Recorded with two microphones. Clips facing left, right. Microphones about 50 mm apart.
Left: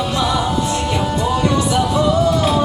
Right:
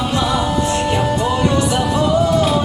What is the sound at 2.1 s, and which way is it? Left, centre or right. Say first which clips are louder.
Music: right 1 dB; centre.